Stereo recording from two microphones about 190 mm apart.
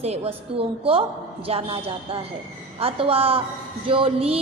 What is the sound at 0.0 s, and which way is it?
A woman's voice, 35° right (ahead or behind).